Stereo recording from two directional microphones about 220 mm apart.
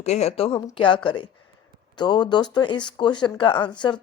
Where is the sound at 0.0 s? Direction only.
30° left (ahead or behind).